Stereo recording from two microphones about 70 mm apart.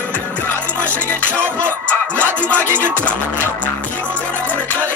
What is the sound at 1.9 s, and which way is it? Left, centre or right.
Music, left.